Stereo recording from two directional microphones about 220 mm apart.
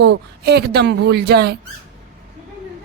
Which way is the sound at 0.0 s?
50° right (ahead or behind).